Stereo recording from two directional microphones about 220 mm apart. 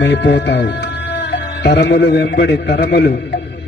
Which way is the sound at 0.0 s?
50° left (ahead or behind).